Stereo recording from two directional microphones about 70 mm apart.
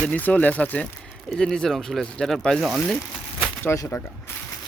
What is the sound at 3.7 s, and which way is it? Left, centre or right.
Speech, left.